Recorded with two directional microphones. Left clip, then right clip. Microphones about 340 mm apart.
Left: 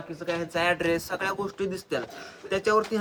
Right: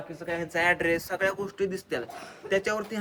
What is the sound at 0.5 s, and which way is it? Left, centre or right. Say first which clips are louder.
Speech: right 1 dB; centre.